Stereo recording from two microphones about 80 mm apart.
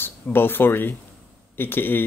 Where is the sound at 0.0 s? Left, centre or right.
Left.